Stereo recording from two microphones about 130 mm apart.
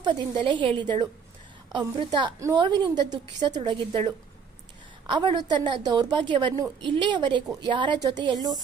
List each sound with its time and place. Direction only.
0.0 s a woman's voice: 35° right (ahead or behind)